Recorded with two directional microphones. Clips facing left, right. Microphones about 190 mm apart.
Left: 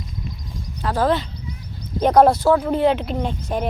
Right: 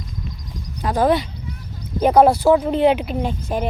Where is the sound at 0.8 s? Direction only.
15° right (ahead or behind).